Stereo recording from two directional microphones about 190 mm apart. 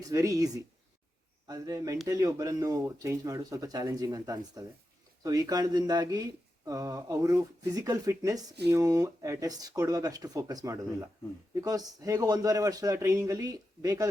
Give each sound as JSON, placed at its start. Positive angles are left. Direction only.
{"t": 0.0, "sound": "speech", "side_deg": -15}